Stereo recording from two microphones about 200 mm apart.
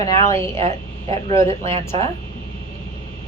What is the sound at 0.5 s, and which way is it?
A woman's voice, 30° right (ahead or behind).